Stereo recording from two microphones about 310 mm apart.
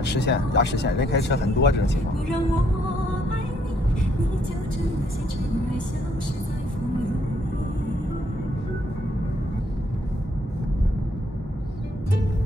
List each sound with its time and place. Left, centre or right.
0.0 s speech: left